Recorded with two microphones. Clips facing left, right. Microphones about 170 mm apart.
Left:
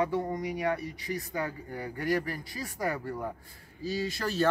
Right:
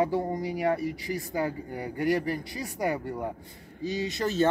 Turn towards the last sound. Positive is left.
turn(degrees=-20)  # may be behind; listen again after turning